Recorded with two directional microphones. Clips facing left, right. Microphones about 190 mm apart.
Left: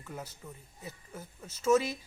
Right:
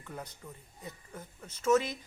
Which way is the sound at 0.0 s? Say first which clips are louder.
Left 1 dB; 5° left (ahead or behind).